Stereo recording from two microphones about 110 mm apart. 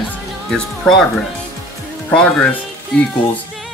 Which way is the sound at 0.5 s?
5° left (ahead or behind).